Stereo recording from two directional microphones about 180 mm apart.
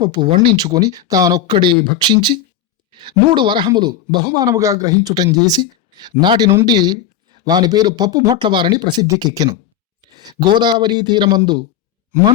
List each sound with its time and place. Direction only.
0.0 s speech: 25° right (ahead or behind)